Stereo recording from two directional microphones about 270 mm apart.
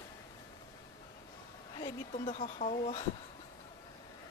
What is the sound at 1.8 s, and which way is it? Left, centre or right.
A woman's voice, centre.